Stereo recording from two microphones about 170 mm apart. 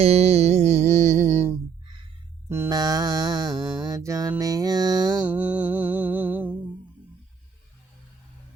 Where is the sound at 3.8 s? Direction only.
20° right (ahead or behind).